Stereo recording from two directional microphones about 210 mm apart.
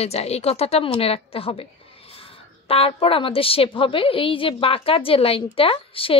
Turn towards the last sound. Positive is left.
turn(degrees=25)  # may be behind; listen again after turning